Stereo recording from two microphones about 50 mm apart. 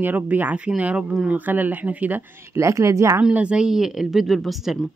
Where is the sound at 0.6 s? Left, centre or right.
Right.